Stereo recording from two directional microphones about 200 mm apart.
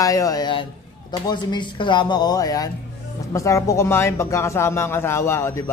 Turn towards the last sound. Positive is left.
turn(degrees=15)  # may be behind; listen again after turning